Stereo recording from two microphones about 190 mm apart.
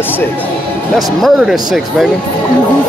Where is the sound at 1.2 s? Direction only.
Centre (ahead or behind).